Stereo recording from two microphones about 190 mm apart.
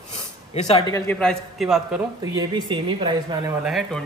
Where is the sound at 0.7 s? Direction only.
25° left (ahead or behind).